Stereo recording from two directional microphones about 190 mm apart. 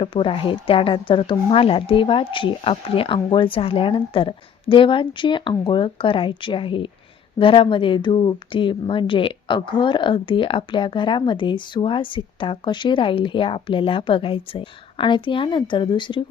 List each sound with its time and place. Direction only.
0.0 s speech: 25° left (ahead or behind)